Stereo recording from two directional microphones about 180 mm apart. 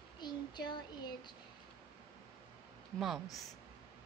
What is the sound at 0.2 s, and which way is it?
A child's voice, 25° left (ahead or behind).